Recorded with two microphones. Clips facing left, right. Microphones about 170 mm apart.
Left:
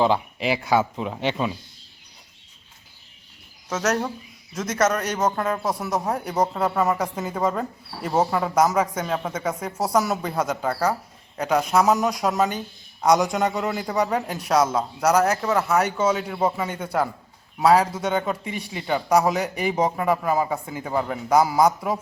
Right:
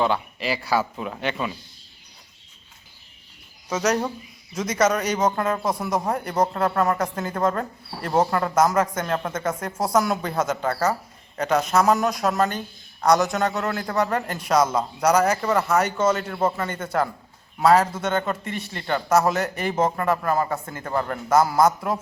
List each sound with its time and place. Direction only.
0.0 s speech: 25° left (ahead or behind)
3.7 s speech: 5° left (ahead or behind)